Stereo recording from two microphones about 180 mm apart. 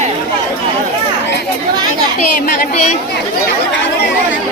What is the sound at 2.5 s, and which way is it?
Speech, 40° left (ahead or behind).